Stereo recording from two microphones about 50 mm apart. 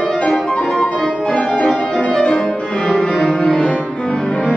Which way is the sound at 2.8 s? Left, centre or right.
Centre.